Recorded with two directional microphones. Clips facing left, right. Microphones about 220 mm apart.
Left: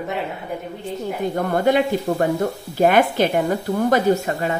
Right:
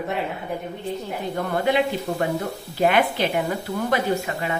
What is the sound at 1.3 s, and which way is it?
A woman's voice, 45° left (ahead or behind).